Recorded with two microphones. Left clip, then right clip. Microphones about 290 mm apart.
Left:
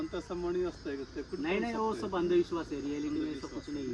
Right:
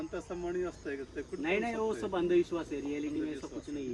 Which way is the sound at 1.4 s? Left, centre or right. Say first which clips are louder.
Right 1 dB; centre.